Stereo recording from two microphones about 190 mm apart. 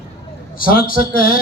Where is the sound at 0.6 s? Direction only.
50° left (ahead or behind).